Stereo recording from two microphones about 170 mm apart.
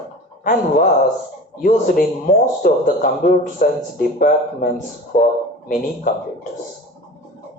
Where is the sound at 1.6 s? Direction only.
55° left (ahead or behind).